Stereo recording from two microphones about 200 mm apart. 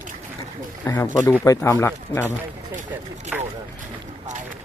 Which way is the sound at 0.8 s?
10° left (ahead or behind).